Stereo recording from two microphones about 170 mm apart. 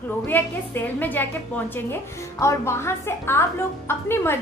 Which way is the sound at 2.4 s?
15° left (ahead or behind).